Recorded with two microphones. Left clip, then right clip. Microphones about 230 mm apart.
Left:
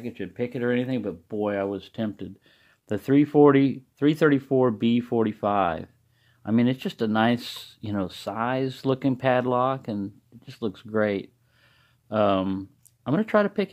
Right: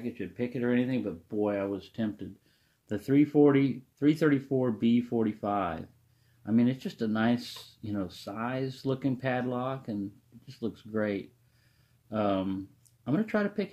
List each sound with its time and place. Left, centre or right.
0.0 s speech: left